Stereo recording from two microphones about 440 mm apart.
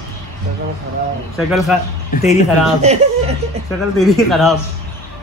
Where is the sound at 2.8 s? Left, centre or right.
Centre.